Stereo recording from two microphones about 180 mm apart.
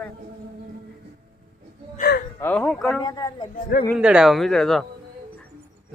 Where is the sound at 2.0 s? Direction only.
60° left (ahead or behind).